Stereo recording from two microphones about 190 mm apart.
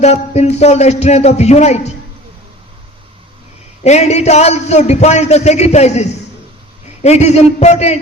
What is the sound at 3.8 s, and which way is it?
A man's voice, 35° left (ahead or behind).